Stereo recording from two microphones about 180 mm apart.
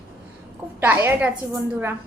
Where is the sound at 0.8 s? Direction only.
10° right (ahead or behind).